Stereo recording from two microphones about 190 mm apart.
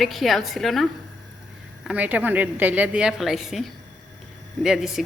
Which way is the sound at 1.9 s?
10° right (ahead or behind).